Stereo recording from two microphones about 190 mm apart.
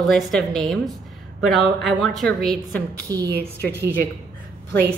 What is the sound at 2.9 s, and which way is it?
Speech, 20° right (ahead or behind).